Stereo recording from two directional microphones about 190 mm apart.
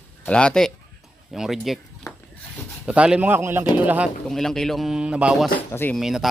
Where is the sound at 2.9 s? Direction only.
5° right (ahead or behind).